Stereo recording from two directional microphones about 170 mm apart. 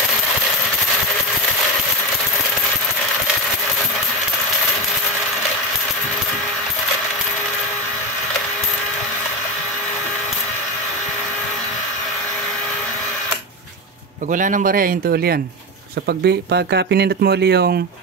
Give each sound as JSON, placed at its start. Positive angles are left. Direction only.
{"t": 14.3, "sound": "speech", "side_deg": -50}
{"t": 16.1, "sound": "speech", "side_deg": -75}